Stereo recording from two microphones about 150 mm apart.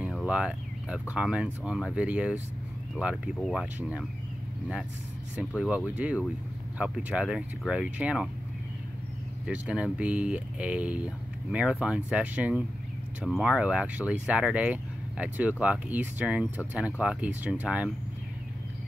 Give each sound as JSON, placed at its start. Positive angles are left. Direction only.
{"t": 0.2, "sound": "speech", "side_deg": -5}
{"t": 5.6, "sound": "speech", "side_deg": -5}
{"t": 9.5, "sound": "speech", "side_deg": -10}